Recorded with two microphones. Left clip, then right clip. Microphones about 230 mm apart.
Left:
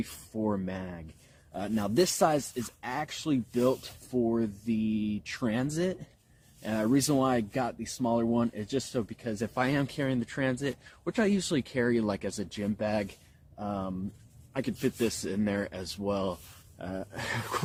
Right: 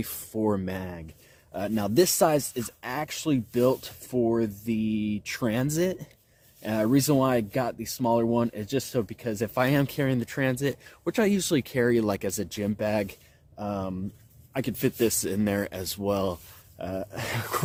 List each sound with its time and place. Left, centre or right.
0.0 s speech: right